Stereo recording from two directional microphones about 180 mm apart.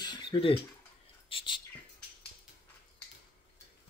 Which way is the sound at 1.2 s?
30° left (ahead or behind).